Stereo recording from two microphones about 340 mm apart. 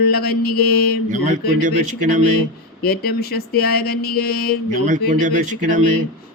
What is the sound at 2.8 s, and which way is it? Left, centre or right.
Speech, left.